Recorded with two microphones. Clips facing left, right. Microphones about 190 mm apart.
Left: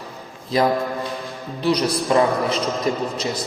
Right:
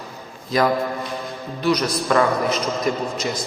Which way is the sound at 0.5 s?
30° left (ahead or behind).